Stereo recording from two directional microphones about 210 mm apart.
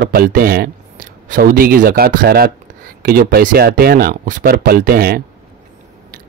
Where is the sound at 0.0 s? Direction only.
45° right (ahead or behind).